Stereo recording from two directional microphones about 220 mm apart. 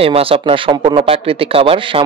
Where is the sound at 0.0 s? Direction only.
25° right (ahead or behind).